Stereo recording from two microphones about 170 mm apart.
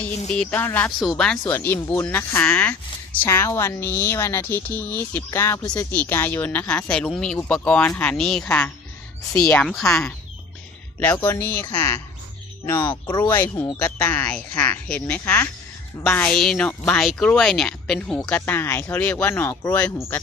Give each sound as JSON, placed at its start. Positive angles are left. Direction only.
{"t": 0.3, "sound": "a woman's voice", "side_deg": 10}
{"t": 12.9, "sound": "speech", "side_deg": 25}
{"t": 13.3, "sound": "a woman's voice", "side_deg": 10}